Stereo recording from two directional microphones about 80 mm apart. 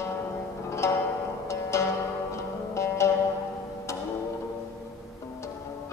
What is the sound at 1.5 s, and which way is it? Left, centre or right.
Zither, left.